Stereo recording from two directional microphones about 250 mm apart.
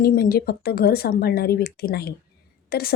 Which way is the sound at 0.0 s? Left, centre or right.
Left.